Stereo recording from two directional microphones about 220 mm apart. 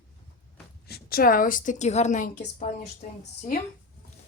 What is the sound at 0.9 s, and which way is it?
A woman's voice, 45° left (ahead or behind).